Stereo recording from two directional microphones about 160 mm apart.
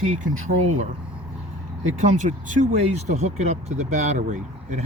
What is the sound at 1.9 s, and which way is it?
Speech, 50° right (ahead or behind).